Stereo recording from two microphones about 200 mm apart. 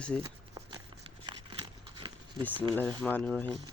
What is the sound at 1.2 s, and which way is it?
Crumpling, 25° right (ahead or behind).